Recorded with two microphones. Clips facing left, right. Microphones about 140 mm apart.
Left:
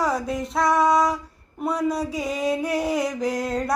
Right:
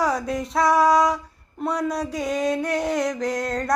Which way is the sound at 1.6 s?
5° left (ahead or behind).